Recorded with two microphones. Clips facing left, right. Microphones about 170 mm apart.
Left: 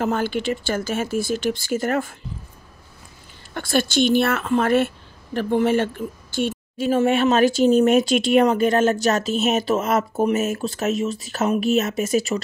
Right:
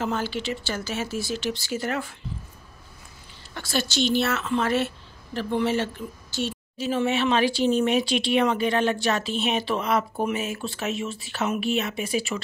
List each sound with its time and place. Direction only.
0.0 s a woman's voice: 50° left (ahead or behind)
3.5 s a woman's voice: 55° left (ahead or behind)